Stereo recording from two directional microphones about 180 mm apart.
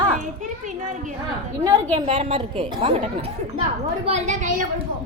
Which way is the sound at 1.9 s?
30° right (ahead or behind).